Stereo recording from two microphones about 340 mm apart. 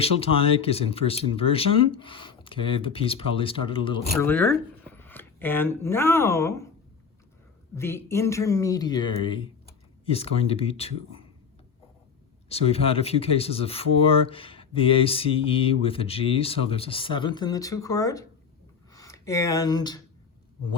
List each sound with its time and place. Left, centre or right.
0.0 s speech: centre
7.8 s speech: centre
12.5 s speech: centre